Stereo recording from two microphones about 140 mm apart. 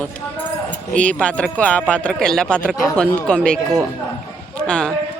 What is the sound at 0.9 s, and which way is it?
Speech, 10° left (ahead or behind).